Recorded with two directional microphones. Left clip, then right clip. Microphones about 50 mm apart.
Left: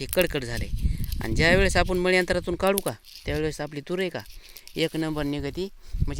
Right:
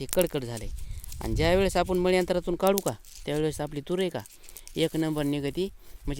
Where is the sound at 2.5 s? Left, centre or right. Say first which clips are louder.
Right 1 dB; right.